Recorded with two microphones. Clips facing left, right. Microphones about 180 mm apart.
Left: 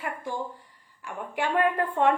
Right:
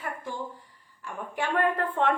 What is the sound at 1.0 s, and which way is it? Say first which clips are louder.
A woman's voice: left 2 dB; 10° left (ahead or behind).